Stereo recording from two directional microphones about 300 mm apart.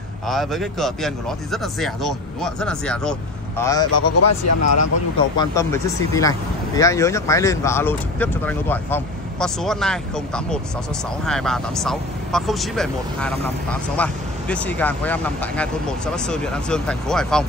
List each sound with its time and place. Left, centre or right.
0.3 s speech: centre
3.9 s speech: left
5.4 s speech: centre